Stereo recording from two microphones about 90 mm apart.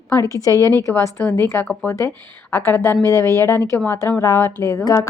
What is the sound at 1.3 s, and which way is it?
A woman's voice, 25° left (ahead or behind).